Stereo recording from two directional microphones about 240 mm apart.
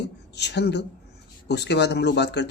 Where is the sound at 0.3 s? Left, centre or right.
Left.